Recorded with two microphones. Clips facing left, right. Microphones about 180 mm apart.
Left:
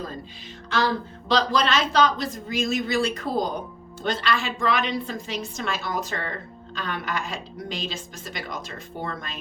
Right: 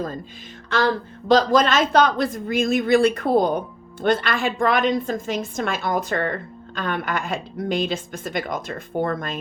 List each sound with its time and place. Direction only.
1.3 s a woman's voice: 50° right (ahead or behind)